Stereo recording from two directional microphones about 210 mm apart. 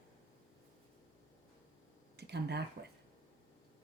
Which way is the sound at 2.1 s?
50° right (ahead or behind).